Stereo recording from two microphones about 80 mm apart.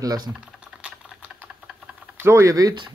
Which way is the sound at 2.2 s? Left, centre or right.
Right.